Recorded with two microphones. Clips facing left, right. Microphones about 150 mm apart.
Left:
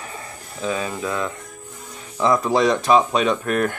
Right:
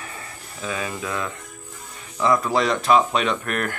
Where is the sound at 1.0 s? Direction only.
15° left (ahead or behind).